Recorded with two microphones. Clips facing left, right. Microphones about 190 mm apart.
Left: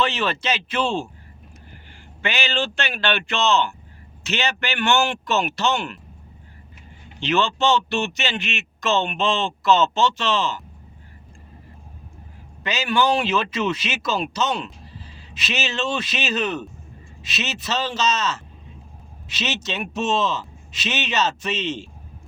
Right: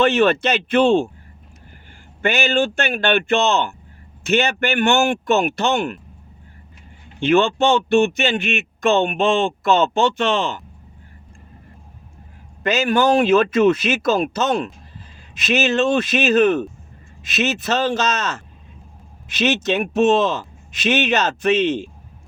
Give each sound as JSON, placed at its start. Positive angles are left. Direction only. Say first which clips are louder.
{"t": 0.0, "sound": "a man's voice", "louder": "right 8 dB", "side_deg": -50}
{"t": 2.2, "sound": "speech", "louder": "right 7 dB", "side_deg": -50}
{"t": 7.2, "sound": "a man's voice", "louder": "right 6 dB", "side_deg": -55}
{"t": 12.6, "sound": "a man's voice", "louder": "right 5 dB", "side_deg": -50}